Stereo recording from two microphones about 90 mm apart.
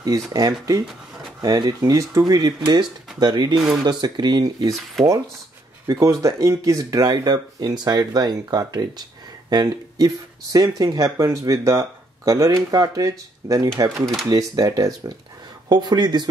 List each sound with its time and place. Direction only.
0.0 s speech: 45° right (ahead or behind)
5.0 s speech: 5° left (ahead or behind)
5.9 s speech: 40° right (ahead or behind)